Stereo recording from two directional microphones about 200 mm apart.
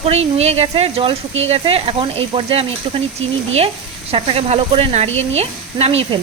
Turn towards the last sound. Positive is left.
turn(degrees=-30)  # may be behind; listen again after turning